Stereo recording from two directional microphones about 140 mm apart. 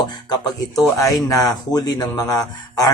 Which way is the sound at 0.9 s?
25° left (ahead or behind).